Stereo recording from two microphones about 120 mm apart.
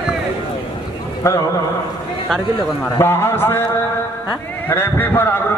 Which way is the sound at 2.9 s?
20° left (ahead or behind).